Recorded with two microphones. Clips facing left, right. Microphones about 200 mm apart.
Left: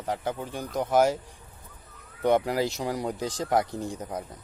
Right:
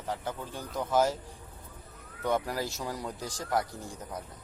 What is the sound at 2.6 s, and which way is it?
Speech, 15° left (ahead or behind).